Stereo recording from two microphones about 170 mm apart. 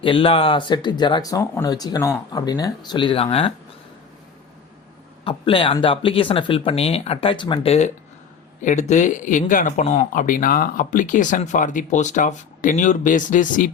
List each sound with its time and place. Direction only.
0.0 s speech: 30° left (ahead or behind)
5.2 s speech: 30° left (ahead or behind); by 13.7 s 50° left (ahead or behind)